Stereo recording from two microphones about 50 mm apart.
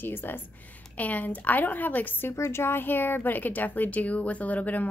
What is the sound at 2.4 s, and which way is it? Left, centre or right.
A woman's voice, left.